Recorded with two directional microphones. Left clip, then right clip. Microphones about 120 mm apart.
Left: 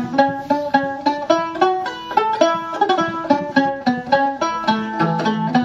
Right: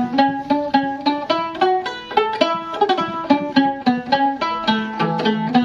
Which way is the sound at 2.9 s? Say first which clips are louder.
Left 1 dB; 35° left (ahead or behind).